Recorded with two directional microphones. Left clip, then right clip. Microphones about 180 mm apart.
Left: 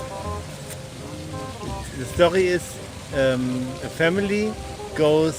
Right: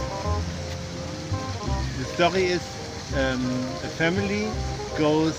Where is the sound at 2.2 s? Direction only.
65° left (ahead or behind).